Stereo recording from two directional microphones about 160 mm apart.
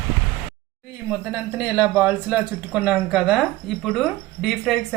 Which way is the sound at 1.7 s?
10° right (ahead or behind).